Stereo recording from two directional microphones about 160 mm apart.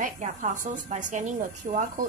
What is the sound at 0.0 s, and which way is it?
A woman's voice, 50° right (ahead or behind).